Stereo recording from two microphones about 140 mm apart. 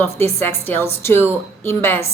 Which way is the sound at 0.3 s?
15° left (ahead or behind).